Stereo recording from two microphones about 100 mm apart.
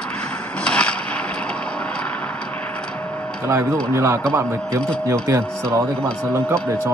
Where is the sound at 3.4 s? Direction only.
25° right (ahead or behind).